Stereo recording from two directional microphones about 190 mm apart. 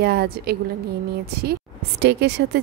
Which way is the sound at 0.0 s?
55° right (ahead or behind).